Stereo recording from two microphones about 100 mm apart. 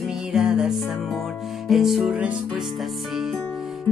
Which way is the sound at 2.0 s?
15° right (ahead or behind).